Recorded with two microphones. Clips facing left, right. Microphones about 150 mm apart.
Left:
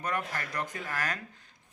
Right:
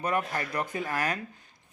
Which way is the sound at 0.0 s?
10° right (ahead or behind).